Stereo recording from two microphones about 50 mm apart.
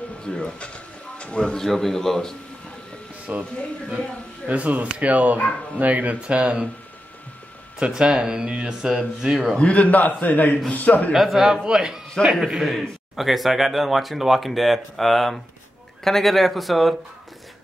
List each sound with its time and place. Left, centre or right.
0.2 s speech: left
3.3 s speech: right
4.5 s speech: right
5.1 s speech: right
7.9 s speech: centre
9.6 s a man's voice: left
11.1 s speech: centre